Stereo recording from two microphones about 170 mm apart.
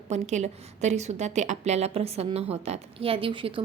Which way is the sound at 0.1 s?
40° right (ahead or behind).